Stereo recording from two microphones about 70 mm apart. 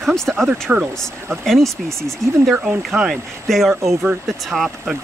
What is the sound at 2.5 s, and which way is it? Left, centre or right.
Speech, centre.